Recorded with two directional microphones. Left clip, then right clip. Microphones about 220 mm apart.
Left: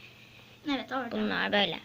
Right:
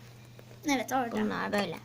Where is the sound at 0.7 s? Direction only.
40° right (ahead or behind).